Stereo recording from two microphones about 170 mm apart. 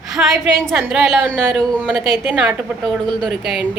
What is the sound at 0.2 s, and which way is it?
A woman's voice, centre (ahead or behind).